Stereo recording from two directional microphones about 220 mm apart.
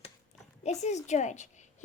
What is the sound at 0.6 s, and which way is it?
A woman's voice, 30° left (ahead or behind).